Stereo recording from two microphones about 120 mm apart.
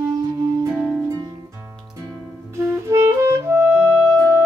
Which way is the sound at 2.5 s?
25° right (ahead or behind).